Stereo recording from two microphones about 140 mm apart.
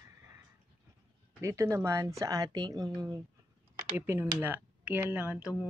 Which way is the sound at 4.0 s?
15° right (ahead or behind).